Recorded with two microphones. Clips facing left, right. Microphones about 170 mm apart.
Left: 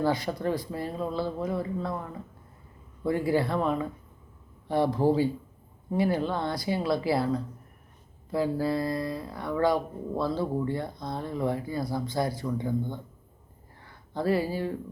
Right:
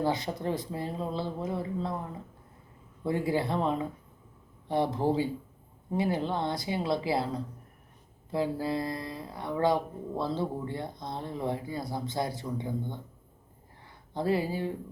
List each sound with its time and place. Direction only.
0.0 s speech: 20° right (ahead or behind)
3.0 s speech: 20° right (ahead or behind)